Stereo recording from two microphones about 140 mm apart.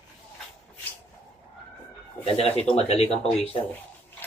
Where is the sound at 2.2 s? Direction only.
45° left (ahead or behind).